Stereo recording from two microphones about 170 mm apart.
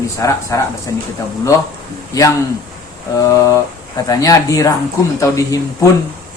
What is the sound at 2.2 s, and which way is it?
Speech, 20° left (ahead or behind).